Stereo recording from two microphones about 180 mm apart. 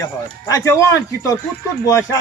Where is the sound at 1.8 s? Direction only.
15° left (ahead or behind).